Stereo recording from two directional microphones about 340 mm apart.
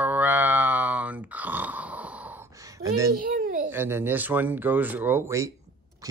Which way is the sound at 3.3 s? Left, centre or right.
Right.